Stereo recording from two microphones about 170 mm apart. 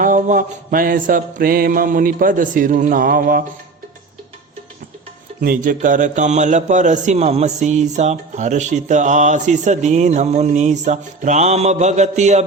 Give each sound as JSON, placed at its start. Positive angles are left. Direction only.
{"t": 0.0, "sound": "a man's voice", "side_deg": -50}
{"t": 5.4, "sound": "a man's voice", "side_deg": -55}